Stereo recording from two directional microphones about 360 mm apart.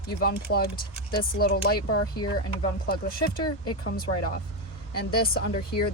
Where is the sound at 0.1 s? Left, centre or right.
Left.